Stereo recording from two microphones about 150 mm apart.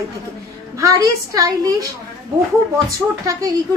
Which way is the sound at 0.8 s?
20° right (ahead or behind).